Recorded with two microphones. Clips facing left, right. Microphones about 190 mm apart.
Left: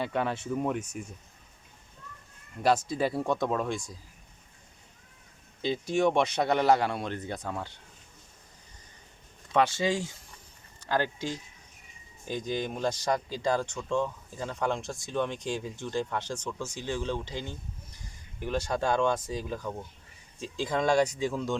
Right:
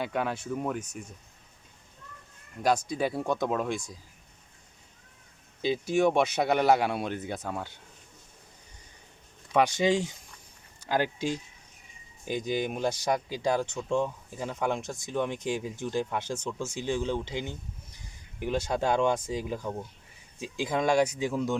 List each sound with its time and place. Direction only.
0.0 s speech: 5° right (ahead or behind)
2.6 s speech: centre (ahead or behind)
5.6 s speech: 5° right (ahead or behind)
9.5 s speech: 15° right (ahead or behind)